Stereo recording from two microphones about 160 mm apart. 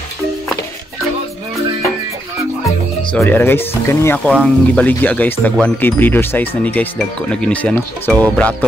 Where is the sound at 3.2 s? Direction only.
15° left (ahead or behind).